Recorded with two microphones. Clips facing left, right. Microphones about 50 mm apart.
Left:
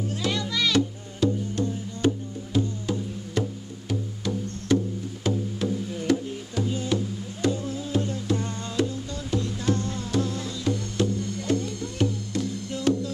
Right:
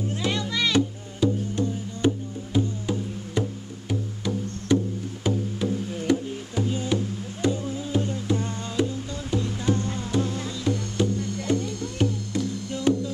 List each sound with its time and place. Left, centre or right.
0.0 s music: right
1.6 s music: centre
10.6 s music: centre